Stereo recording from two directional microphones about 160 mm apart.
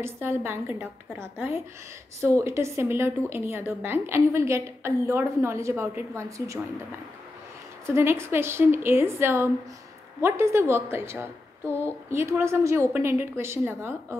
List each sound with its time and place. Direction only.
0.0 s a woman's voice: 15° right (ahead or behind)
7.8 s a woman's voice: 15° right (ahead or behind)